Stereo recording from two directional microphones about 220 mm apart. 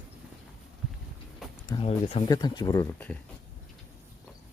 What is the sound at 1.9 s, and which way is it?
Speech, 25° left (ahead or behind).